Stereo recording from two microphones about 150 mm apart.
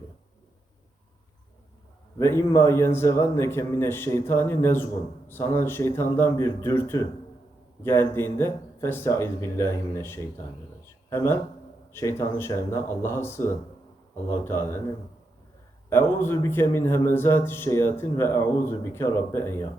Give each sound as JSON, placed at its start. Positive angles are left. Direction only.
{"t": 2.1, "sound": "a man's voice", "side_deg": 20}
{"t": 16.2, "sound": "a man's voice", "side_deg": 15}